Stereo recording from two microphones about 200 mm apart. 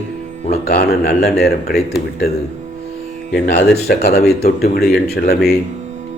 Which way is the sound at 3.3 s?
55° left (ahead or behind).